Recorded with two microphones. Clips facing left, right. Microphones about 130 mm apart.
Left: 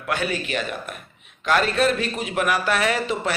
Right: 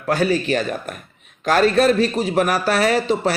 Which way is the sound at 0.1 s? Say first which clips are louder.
Right 7 dB; 35° right (ahead or behind).